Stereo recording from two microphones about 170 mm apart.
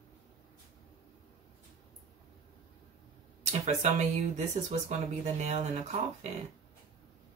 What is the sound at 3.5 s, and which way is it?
Speech, 40° right (ahead or behind).